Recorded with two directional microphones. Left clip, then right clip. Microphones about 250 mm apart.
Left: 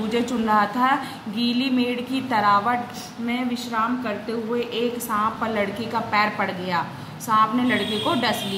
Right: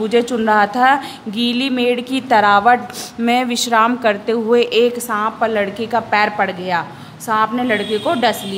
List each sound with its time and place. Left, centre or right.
0.1 s a woman's voice: right
3.3 s a woman's voice: right